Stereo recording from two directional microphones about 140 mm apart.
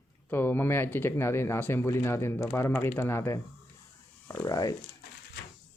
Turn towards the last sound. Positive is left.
turn(degrees=25)  # may be behind; listen again after turning